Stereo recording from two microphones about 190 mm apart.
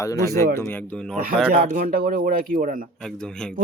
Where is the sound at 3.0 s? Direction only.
5° left (ahead or behind).